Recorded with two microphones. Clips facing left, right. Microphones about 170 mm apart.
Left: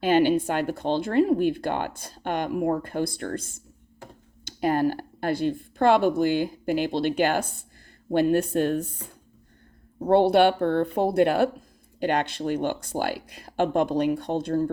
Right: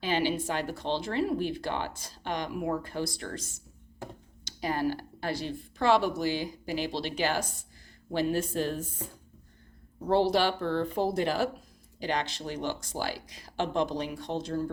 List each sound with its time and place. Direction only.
0.0 s speech: 55° left (ahead or behind)
10.1 s speech: 60° left (ahead or behind)